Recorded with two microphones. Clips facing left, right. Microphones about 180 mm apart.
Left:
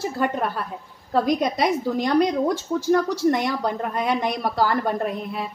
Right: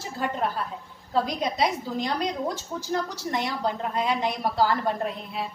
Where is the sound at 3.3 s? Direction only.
55° left (ahead or behind).